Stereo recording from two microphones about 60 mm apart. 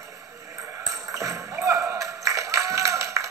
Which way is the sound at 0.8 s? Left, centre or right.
Right.